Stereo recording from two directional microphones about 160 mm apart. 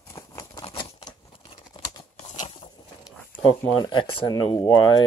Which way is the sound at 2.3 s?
45° left (ahead or behind).